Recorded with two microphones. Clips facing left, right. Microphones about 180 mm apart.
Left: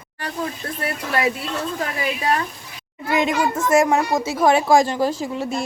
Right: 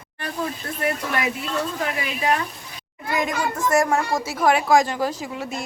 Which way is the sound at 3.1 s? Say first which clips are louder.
Left 4 dB; 25° left (ahead or behind).